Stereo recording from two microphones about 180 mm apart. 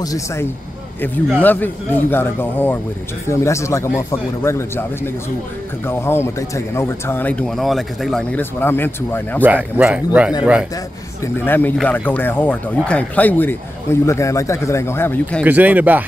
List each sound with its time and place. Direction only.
0.0 s speech: 20° left (ahead or behind)
5.9 s speech: 15° left (ahead or behind)
9.4 s a man's voice: 10° right (ahead or behind)
11.4 s speech: 10° left (ahead or behind)
15.4 s a man's voice: 10° right (ahead or behind)